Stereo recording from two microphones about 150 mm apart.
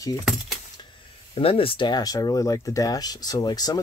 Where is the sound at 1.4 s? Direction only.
40° left (ahead or behind).